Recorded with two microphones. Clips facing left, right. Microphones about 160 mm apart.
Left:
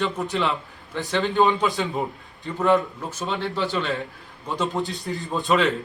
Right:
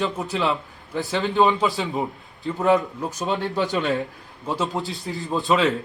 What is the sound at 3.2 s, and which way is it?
Speech, 40° right (ahead or behind).